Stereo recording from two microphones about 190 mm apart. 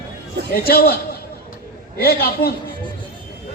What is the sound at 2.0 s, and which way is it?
Speech, 55° left (ahead or behind).